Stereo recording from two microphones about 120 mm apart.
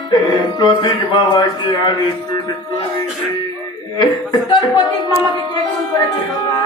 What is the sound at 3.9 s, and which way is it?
Speech, 40° left (ahead or behind).